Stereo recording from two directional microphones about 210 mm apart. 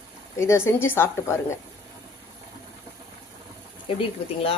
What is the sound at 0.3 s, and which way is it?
A woman's voice, 15° left (ahead or behind).